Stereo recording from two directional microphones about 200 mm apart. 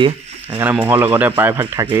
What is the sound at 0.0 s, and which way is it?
Speech, 25° right (ahead or behind).